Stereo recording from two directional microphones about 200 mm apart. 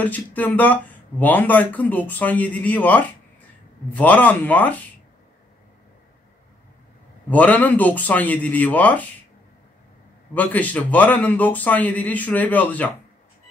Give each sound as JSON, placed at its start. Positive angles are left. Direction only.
{"t": 0.0, "sound": "speech", "side_deg": 10}
{"t": 7.2, "sound": "speech", "side_deg": 5}
{"t": 10.3, "sound": "speech", "side_deg": 10}